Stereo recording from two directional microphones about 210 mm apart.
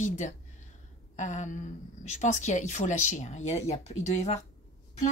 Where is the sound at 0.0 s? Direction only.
35° left (ahead or behind).